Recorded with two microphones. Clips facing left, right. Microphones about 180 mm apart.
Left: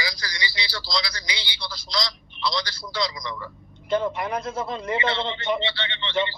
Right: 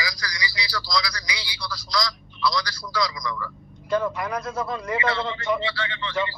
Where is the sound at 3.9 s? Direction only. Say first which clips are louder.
Even; 25° left (ahead or behind).